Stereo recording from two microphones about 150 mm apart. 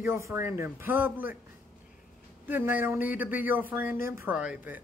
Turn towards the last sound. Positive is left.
turn(degrees=-10)  # may be behind; listen again after turning